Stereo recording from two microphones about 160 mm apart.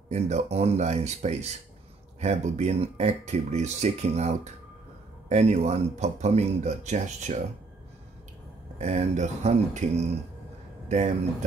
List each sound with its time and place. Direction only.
0.1 s speech: 45° right (ahead or behind)
8.7 s speech: 45° right (ahead or behind)